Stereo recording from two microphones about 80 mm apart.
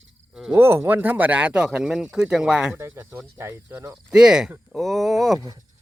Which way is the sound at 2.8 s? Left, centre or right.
Right.